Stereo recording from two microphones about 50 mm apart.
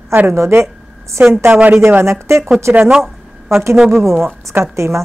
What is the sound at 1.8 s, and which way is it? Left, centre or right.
Speech, right.